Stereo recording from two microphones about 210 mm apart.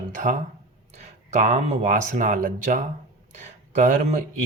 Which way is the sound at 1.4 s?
35° right (ahead or behind).